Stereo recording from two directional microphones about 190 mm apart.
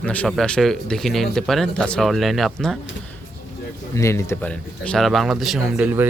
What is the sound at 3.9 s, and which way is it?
Speech, 15° left (ahead or behind).